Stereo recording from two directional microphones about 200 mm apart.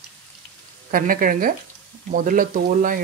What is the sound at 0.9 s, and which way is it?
Speech, 45° right (ahead or behind).